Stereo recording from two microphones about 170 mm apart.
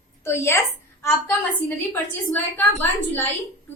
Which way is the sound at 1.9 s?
15° left (ahead or behind).